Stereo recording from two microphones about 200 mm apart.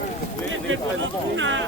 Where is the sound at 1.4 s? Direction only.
70° right (ahead or behind).